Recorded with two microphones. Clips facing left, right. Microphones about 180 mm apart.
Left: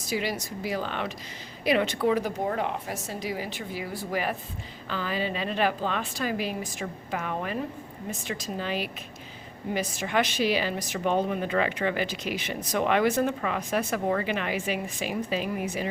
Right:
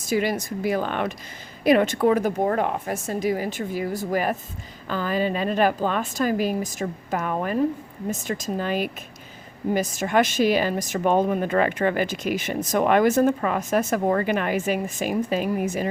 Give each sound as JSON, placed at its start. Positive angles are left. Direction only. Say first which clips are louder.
{"t": 0.1, "sound": "a woman's voice", "louder": "right 7 dB", "side_deg": -50}